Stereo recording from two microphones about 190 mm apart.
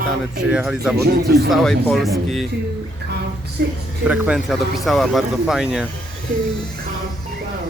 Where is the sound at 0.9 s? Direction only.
55° right (ahead or behind).